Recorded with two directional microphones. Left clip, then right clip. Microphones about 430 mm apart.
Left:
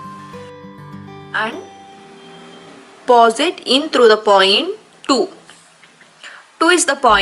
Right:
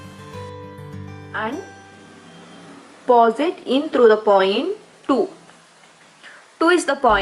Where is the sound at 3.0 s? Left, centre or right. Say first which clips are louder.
Left 4 dB; centre.